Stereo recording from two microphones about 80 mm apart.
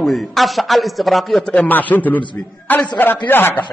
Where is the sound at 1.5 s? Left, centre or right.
Left.